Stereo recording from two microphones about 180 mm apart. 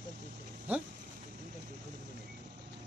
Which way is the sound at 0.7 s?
10° right (ahead or behind).